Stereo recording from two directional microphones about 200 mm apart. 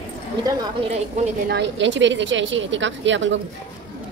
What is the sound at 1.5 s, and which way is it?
A woman's voice, 60° right (ahead or behind).